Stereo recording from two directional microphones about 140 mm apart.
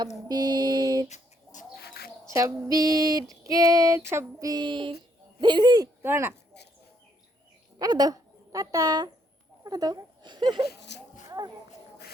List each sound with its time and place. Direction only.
0.3 s mantra: 30° right (ahead or behind)
1.0 s a sound: 55° left (ahead or behind)
2.3 s female singing: 25° right (ahead or behind)
5.4 s speech: 30° right (ahead or behind)
6.0 s speech: 15° right (ahead or behind)
7.8 s speech: 30° right (ahead or behind)
11.3 s a sound: 30° right (ahead or behind)